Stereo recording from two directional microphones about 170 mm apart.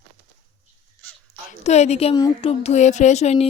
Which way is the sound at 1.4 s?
40° left (ahead or behind).